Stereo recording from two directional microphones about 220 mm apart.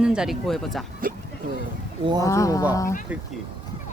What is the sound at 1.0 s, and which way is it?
Speech, 40° right (ahead or behind).